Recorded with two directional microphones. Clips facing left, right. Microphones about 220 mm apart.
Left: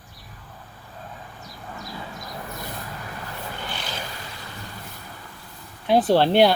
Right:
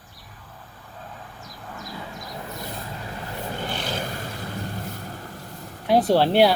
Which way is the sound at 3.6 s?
50° right (ahead or behind).